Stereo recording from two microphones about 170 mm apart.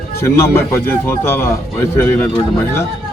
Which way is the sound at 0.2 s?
15° left (ahead or behind).